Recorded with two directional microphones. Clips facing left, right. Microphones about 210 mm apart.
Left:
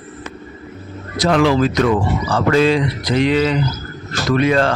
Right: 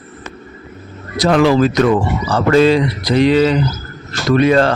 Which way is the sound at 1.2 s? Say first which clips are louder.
Right 3 dB; 40° right (ahead or behind).